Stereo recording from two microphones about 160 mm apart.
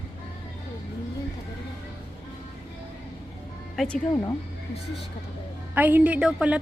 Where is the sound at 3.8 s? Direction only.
5° left (ahead or behind).